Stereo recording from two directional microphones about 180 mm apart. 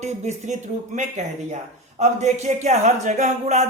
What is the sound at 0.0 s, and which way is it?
Speech, 40° right (ahead or behind).